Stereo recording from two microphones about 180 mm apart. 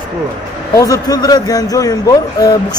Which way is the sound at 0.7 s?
20° left (ahead or behind).